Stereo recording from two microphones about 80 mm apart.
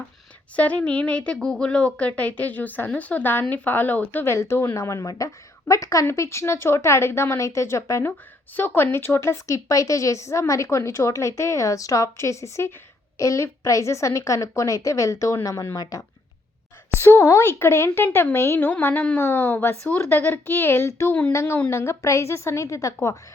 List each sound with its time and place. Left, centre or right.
0.5 s a woman's voice: centre; by 8.1 s left
8.5 s a woman's voice: left
16.9 s a woman's voice: left